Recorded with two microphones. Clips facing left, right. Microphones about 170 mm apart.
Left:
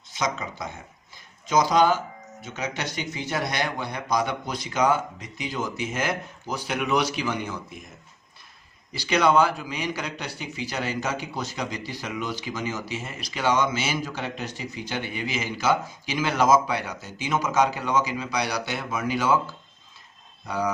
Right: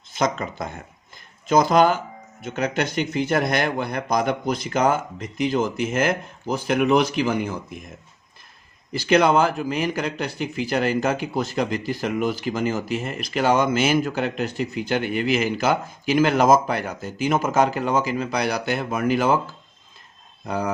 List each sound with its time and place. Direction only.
0.1 s speech: 55° right (ahead or behind)
8.9 s speech: 50° right (ahead or behind)
20.4 s speech: 50° right (ahead or behind)